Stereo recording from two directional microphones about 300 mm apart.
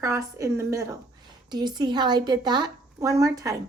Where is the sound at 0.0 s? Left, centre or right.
Centre.